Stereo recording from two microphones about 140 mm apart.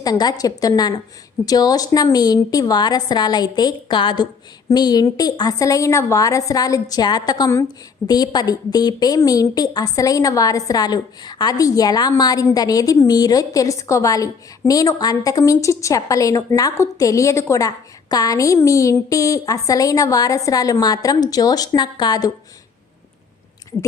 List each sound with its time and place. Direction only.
0.0 s a woman's voice: 30° left (ahead or behind)